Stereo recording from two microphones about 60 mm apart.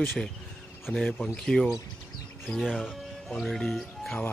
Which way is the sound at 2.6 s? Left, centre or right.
Centre.